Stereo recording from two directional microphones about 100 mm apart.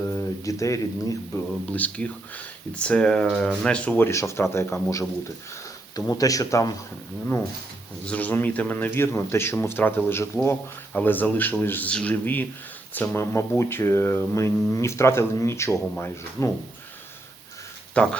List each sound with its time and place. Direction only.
0.0 s speech: 30° left (ahead or behind)
1.7 s speech: 15° left (ahead or behind); by 6.7 s 30° left (ahead or behind)
8.0 s speech: 15° left (ahead or behind)
17.9 s speech: 10° left (ahead or behind)